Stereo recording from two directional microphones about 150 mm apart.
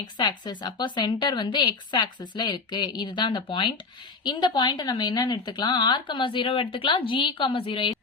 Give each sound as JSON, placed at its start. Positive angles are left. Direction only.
{"t": 0.2, "sound": "a woman's voice", "side_deg": 30}